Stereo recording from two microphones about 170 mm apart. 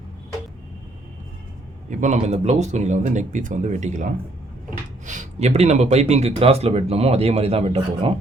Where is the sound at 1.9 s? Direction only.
45° right (ahead or behind).